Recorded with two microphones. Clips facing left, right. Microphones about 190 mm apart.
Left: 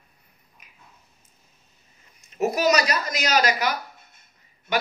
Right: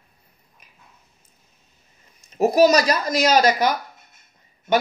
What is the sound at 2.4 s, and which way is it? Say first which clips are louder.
Speech: right 6 dB; 35° right (ahead or behind).